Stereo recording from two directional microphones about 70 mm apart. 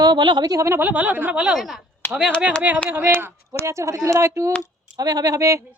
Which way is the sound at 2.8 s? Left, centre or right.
Right.